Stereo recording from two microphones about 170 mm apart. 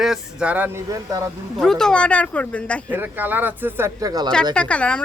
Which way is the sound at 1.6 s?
5° left (ahead or behind).